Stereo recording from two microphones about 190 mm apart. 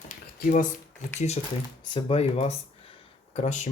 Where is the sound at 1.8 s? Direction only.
25° left (ahead or behind).